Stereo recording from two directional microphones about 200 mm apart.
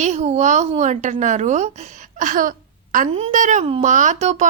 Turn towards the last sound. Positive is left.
turn(degrees=-35)  # may be behind; listen again after turning